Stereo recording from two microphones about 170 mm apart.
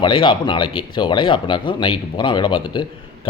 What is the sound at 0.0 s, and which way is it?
Speech, 30° left (ahead or behind).